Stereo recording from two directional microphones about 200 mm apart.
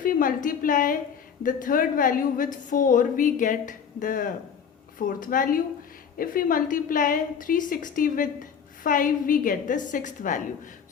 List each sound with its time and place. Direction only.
0.0 s a woman's voice: 45° left (ahead or behind)